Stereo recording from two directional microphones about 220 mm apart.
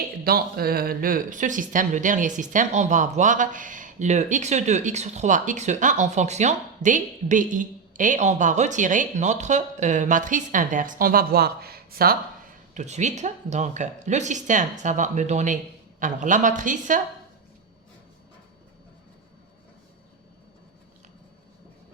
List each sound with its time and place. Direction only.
0.3 s speech: 45° right (ahead or behind)
12.7 s speech: 30° right (ahead or behind)